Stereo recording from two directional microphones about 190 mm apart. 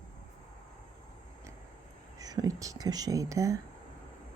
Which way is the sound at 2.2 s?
20° right (ahead or behind).